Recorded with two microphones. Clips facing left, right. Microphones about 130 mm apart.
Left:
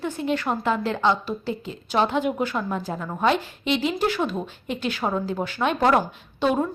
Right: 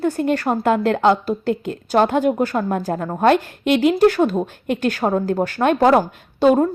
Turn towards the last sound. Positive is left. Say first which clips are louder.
# right 8 dB
turn(degrees=-40)  # may be behind; listen again after turning